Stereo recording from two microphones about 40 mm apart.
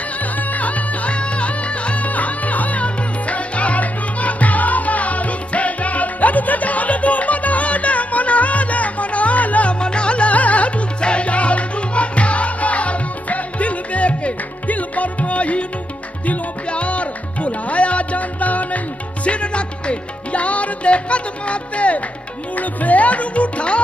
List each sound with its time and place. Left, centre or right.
0.2 s music: left